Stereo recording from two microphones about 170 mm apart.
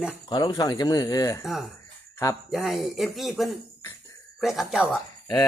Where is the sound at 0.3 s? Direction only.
25° left (ahead or behind).